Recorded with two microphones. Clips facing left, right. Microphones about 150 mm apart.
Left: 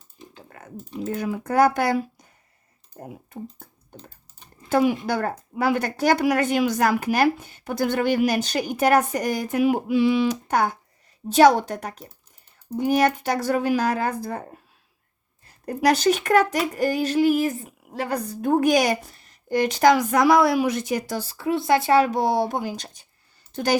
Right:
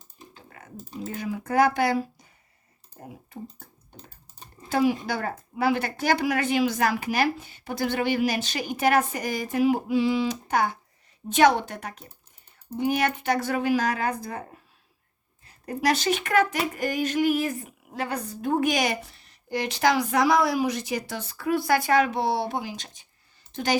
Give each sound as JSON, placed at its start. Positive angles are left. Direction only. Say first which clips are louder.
{"t": 1.1, "sound": "speech", "louder": "left 2 dB", "side_deg": 50}
{"t": 4.7, "sound": "speech", "louder": "left 3 dB", "side_deg": 50}
{"t": 11.3, "sound": "speech", "louder": "left 4 dB", "side_deg": 35}
{"t": 15.6, "sound": "speech", "louder": "left 5 dB", "side_deg": 40}
{"t": 21.2, "sound": "speech", "louder": "left 1 dB", "side_deg": 30}